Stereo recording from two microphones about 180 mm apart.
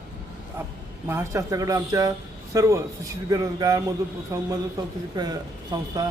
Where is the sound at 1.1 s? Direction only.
15° right (ahead or behind).